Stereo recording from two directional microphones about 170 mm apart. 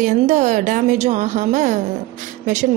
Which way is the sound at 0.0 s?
45° right (ahead or behind).